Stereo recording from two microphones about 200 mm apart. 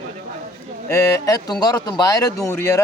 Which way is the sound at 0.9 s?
15° left (ahead or behind).